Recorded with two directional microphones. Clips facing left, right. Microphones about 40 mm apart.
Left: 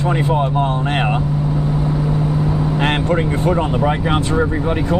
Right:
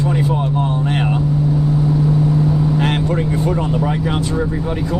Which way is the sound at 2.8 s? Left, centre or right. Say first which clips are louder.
Left 1 dB; left.